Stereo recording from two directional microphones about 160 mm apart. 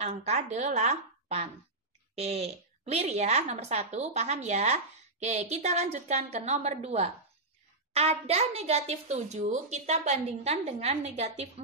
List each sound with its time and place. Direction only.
0.0 s a woman's voice: 45° right (ahead or behind)